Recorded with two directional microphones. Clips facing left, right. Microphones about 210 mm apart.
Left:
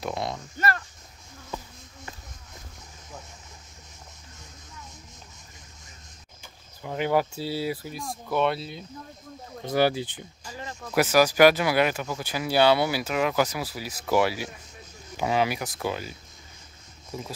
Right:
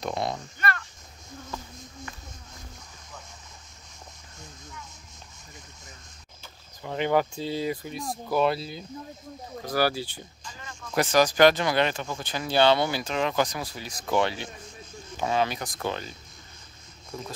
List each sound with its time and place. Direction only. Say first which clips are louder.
0.0 s speech: right 1 dB; 5° left (ahead or behind)
0.6 s speech: left 5 dB; 35° left (ahead or behind)
6.8 s speech: even; 5° left (ahead or behind)
9.7 s speech: left 3 dB; 20° left (ahead or behind)
10.4 s speech: left 9 dB; 35° left (ahead or behind)
11.0 s speech: left 1 dB; 5° left (ahead or behind)